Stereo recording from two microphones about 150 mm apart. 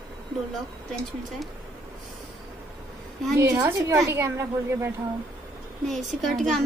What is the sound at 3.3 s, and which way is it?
A woman's voice, 20° right (ahead or behind).